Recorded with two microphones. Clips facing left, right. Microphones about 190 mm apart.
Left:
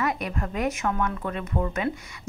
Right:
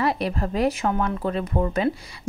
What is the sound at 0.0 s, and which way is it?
A woman's voice, 30° right (ahead or behind).